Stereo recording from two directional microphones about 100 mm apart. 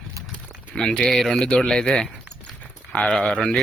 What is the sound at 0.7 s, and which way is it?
A man's voice, 10° left (ahead or behind).